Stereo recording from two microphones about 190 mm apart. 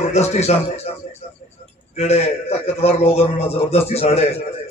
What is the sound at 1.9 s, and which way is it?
A man's voice, 35° left (ahead or behind).